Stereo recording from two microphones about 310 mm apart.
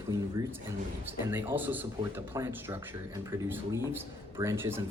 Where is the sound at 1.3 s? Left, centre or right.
Centre.